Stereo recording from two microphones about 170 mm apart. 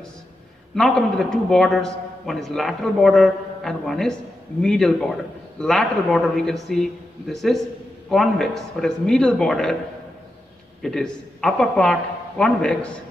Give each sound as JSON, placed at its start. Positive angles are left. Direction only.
{"t": 0.7, "sound": "a man's voice", "side_deg": 5}
{"t": 10.8, "sound": "a man's voice", "side_deg": 5}